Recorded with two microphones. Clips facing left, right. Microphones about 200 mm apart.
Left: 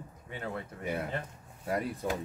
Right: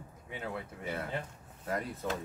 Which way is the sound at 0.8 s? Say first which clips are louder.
Left 3 dB; 15° left (ahead or behind).